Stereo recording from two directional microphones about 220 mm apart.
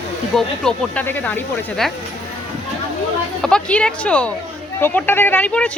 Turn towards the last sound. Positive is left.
turn(degrees=5)  # may be behind; listen again after turning